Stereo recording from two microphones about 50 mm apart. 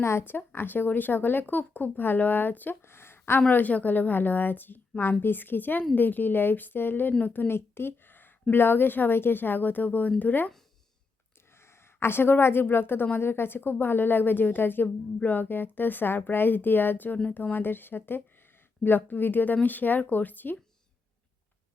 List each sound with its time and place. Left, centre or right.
0.0 s speech: left
0.3 s a woman's voice: left
2.8 s a sound: left
3.5 s a woman's voice: left
11.9 s a woman's voice: left